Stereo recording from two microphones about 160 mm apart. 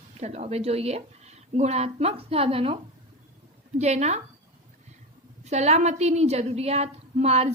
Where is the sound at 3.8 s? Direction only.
45° right (ahead or behind).